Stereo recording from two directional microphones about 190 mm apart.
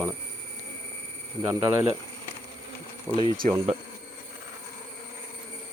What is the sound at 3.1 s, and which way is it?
Speech, 25° left (ahead or behind).